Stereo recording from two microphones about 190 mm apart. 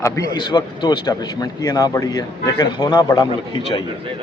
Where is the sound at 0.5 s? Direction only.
20° left (ahead or behind).